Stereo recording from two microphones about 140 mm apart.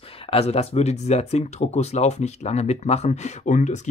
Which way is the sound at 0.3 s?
45° left (ahead or behind).